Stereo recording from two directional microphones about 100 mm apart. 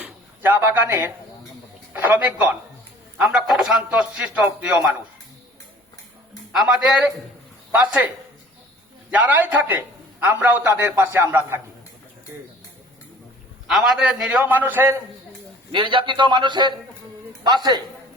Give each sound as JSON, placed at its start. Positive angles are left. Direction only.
{"t": 0.0, "sound": "a sound", "side_deg": -15}
{"t": 1.9, "sound": "a man's voice", "side_deg": -15}
{"t": 3.2, "sound": "a man's voice", "side_deg": -5}
{"t": 6.5, "sound": "a man's voice", "side_deg": -5}
{"t": 10.6, "sound": "a man's voice", "side_deg": -25}
{"t": 13.7, "sound": "a man's voice", "side_deg": -5}
{"t": 14.4, "sound": "a man's voice", "side_deg": -20}
{"t": 15.7, "sound": "a man's voice", "side_deg": -55}